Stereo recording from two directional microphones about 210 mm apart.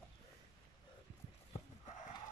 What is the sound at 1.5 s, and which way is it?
Horse, 35° left (ahead or behind).